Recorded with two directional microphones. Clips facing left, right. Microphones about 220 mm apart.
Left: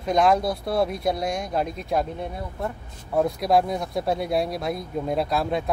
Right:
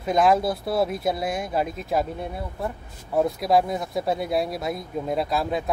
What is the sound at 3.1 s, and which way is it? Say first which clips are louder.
Speech: even; centre (ahead or behind).